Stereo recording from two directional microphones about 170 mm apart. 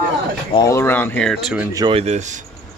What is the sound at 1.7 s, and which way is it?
Speech, 20° right (ahead or behind).